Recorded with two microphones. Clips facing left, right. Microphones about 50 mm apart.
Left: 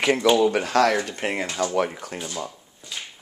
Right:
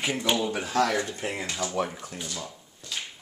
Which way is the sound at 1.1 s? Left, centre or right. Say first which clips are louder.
Left 5 dB; left.